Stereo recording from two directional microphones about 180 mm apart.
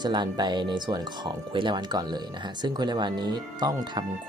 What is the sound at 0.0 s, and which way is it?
Speech, 25° right (ahead or behind).